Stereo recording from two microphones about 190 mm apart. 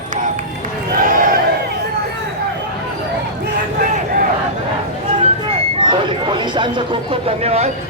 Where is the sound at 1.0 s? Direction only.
45° right (ahead or behind).